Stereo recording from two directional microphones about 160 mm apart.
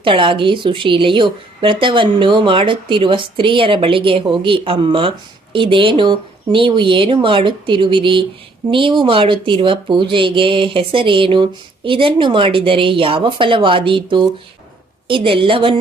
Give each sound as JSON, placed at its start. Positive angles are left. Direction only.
{"t": 0.0, "sound": "a woman's voice", "side_deg": -30}